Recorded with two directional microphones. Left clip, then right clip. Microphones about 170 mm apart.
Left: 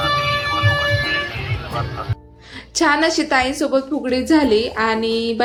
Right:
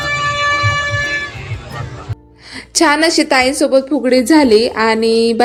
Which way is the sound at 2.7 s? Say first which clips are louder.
Right 5 dB; 35° right (ahead or behind).